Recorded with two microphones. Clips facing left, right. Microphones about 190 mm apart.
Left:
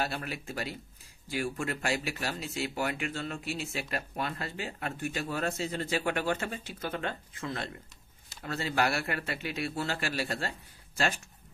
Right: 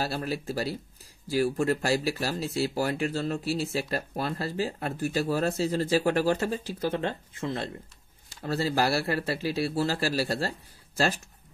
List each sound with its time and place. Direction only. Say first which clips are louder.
0.0 s speech: right 4 dB; 35° right (ahead or behind)